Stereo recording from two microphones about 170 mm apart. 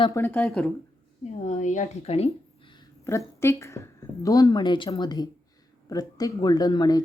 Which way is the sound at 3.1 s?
15° left (ahead or behind).